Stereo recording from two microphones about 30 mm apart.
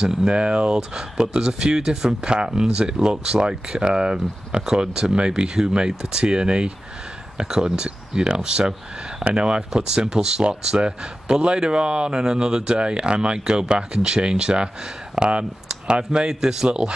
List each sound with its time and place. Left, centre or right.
0.3 s speech: right
0.7 s speech: right